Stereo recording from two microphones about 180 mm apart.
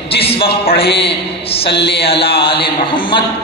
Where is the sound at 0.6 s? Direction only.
60° left (ahead or behind).